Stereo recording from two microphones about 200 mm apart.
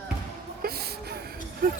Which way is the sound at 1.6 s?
45° right (ahead or behind).